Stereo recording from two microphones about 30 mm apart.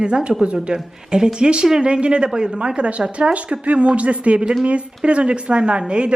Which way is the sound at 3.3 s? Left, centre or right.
Right.